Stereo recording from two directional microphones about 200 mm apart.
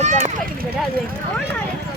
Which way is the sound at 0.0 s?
35° right (ahead or behind).